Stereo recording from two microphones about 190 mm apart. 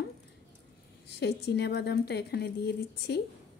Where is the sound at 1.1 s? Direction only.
60° left (ahead or behind).